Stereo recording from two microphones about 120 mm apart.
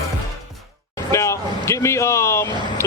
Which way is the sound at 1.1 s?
25° left (ahead or behind).